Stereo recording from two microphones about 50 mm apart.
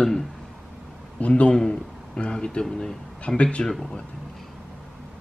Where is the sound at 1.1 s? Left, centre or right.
Left.